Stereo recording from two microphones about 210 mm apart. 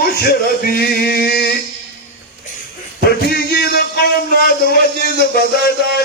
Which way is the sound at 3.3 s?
45° left (ahead or behind).